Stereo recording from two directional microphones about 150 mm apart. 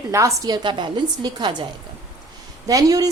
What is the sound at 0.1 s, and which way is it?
A woman's voice, 20° right (ahead or behind).